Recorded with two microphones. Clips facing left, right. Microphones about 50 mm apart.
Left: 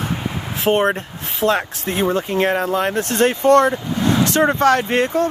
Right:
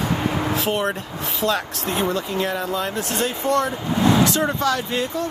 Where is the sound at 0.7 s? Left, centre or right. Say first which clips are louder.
Left 6 dB; left.